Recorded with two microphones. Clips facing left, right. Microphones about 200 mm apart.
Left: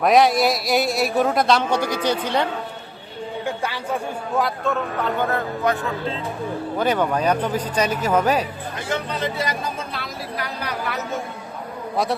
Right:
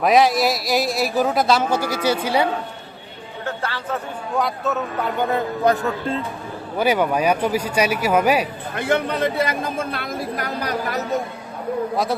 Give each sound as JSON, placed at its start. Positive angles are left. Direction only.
{"t": 0.0, "sound": "a man's voice", "side_deg": 0}
{"t": 3.4, "sound": "music", "side_deg": 15}
{"t": 4.4, "sound": "a man's voice", "side_deg": 0}
{"t": 5.7, "sound": "speech", "side_deg": -35}
{"t": 6.7, "sound": "a man's voice", "side_deg": -10}
{"t": 8.7, "sound": "a woman's voice", "side_deg": -55}